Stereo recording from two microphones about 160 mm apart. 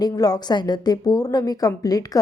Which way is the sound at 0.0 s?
25° left (ahead or behind).